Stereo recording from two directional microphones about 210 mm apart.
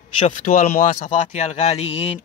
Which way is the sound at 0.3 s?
40° left (ahead or behind).